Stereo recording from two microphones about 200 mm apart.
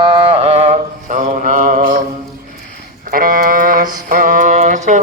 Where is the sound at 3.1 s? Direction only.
45° right (ahead or behind).